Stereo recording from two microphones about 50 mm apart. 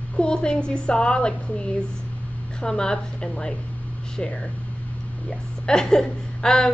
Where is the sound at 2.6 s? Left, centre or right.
Centre.